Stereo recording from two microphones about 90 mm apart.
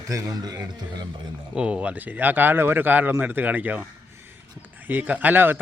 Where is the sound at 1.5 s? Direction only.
10° right (ahead or behind).